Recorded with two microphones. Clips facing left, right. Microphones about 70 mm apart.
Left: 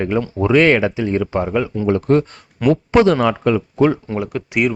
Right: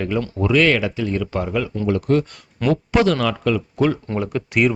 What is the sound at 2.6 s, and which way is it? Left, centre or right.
Speech, centre.